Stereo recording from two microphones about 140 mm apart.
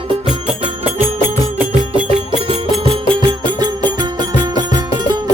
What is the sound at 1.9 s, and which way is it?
Music, 35° left (ahead or behind).